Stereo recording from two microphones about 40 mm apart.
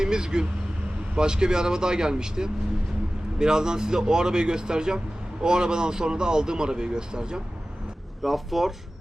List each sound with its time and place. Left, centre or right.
0.0 s speech: centre
8.2 s speech: centre